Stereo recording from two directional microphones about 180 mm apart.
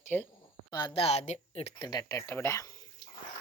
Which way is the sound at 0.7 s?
30° left (ahead or behind).